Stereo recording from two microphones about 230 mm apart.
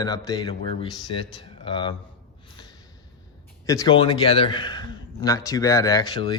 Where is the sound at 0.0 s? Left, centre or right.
Centre.